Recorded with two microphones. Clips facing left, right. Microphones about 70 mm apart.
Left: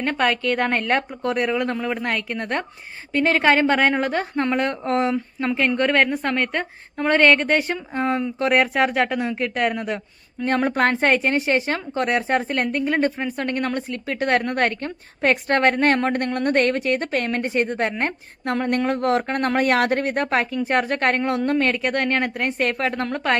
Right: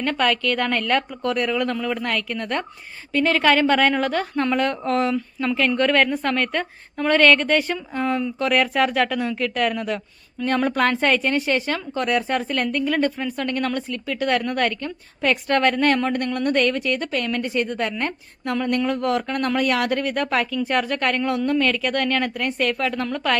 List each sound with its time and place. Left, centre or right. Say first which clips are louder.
0.0 s a woman's voice: even; left
13.9 s a woman's voice: left 3 dB; left